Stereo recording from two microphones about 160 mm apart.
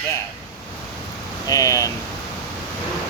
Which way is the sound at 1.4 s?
20° left (ahead or behind).